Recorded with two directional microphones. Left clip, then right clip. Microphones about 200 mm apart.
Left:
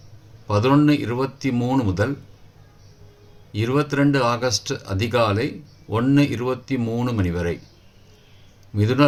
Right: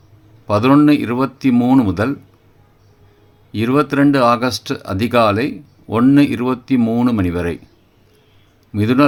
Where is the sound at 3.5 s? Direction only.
50° right (ahead or behind).